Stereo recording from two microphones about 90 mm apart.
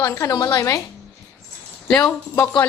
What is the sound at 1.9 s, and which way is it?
Speech, 10° left (ahead or behind).